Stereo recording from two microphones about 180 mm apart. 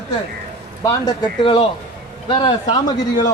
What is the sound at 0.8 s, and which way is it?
A man's voice, 20° left (ahead or behind).